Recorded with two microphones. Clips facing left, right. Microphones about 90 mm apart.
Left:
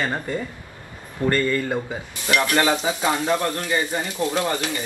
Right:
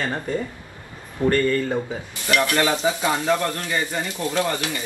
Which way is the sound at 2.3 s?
20° left (ahead or behind).